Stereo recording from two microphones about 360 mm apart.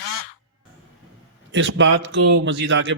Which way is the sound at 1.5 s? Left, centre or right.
Right.